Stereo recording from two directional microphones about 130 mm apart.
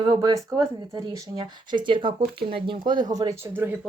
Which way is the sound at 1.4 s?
40° right (ahead or behind).